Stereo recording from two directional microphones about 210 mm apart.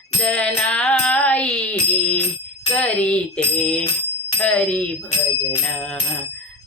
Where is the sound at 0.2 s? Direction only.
5° left (ahead or behind).